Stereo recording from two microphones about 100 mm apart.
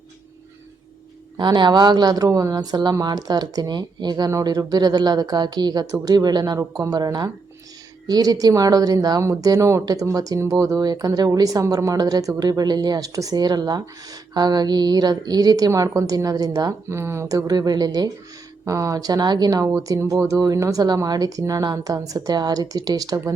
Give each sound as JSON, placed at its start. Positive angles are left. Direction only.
{"t": 1.4, "sound": "a woman's voice", "side_deg": -50}
{"t": 16.9, "sound": "speech", "side_deg": -25}